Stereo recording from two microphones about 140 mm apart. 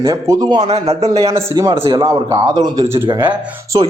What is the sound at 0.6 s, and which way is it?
Speech, 50° right (ahead or behind).